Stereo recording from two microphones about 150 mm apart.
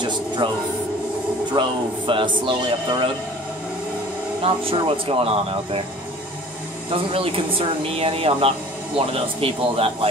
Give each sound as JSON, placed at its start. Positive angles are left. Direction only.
{"t": 0.4, "sound": "speech", "side_deg": -35}
{"t": 4.4, "sound": "speech", "side_deg": -35}
{"t": 6.9, "sound": "speech", "side_deg": -40}